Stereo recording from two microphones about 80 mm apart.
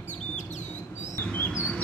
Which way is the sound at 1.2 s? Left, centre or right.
Left.